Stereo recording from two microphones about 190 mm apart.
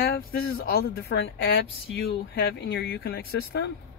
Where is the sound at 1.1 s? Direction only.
70° left (ahead or behind).